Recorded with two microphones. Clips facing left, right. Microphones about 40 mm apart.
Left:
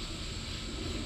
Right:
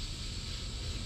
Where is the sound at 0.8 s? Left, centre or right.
Left.